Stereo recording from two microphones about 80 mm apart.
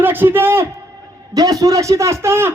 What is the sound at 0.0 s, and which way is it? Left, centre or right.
Speech, right.